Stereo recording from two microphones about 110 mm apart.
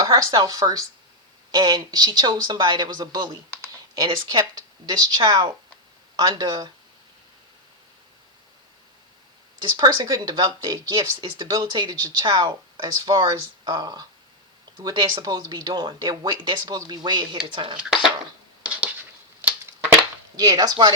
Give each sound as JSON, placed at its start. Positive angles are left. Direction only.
{"t": 0.0, "sound": "speech", "side_deg": -35}
{"t": 4.9, "sound": "speech", "side_deg": -40}
{"t": 9.6, "sound": "speech", "side_deg": -45}
{"t": 18.6, "sound": "a sound", "side_deg": -15}
{"t": 20.3, "sound": "speech", "side_deg": -35}